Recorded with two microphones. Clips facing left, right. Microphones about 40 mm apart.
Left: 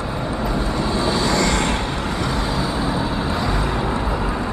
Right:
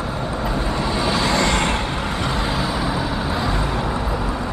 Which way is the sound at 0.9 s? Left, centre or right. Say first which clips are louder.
Even; right.